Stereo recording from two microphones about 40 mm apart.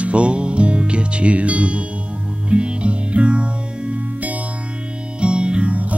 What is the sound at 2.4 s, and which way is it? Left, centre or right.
Music, right.